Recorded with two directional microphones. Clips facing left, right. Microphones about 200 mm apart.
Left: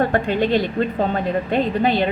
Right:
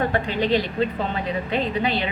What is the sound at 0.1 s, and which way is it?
A woman's voice, 50° left (ahead or behind).